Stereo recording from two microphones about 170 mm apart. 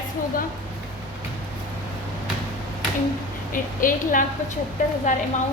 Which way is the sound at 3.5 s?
55° left (ahead or behind).